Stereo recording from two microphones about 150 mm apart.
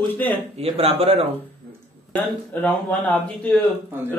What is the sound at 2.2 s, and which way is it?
Speech, 5° left (ahead or behind).